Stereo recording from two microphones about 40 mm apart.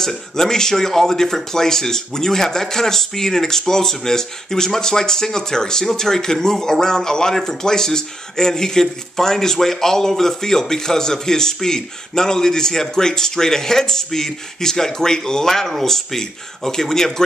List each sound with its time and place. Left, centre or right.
0.0 s speech: centre